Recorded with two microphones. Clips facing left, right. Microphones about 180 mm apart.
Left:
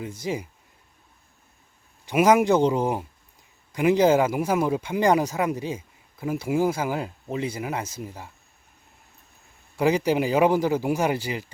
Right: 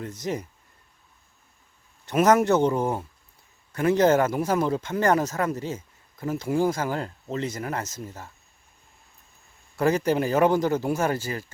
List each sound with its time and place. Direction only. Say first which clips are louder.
0.0 s a man's voice: left 1 dB; 10° left (ahead or behind)
2.0 s a man's voice: left 1 dB; 10° left (ahead or behind)
9.7 s a man's voice: left 1 dB; 10° left (ahead or behind)